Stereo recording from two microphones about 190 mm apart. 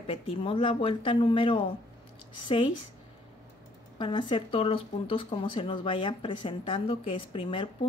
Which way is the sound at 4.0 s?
25° left (ahead or behind).